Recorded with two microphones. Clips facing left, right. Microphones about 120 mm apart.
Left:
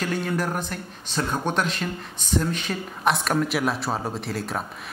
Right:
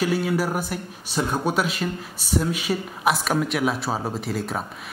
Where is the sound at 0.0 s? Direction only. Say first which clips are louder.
Right 3 dB; 5° right (ahead or behind).